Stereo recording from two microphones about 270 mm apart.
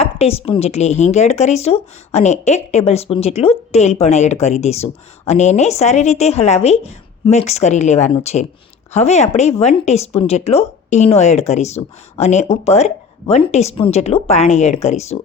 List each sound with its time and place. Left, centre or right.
0.0 s speech: left